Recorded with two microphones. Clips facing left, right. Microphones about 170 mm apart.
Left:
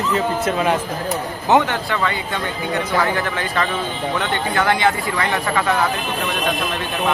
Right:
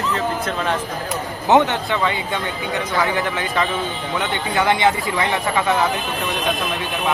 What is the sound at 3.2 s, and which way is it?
A man's voice, 15° right (ahead or behind).